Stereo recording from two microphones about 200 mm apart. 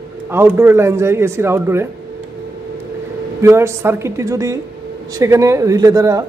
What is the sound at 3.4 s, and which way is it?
Speech, 15° right (ahead or behind).